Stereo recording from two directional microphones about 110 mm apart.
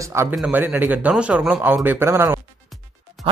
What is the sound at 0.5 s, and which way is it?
A man's voice, 15° right (ahead or behind).